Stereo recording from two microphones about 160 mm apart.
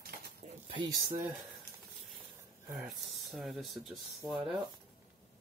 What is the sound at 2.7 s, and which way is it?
Speech, 5° right (ahead or behind).